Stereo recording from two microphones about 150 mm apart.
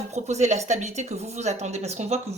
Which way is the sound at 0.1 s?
50° right (ahead or behind).